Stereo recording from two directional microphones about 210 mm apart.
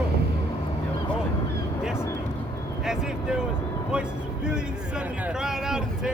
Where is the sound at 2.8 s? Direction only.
5° right (ahead or behind).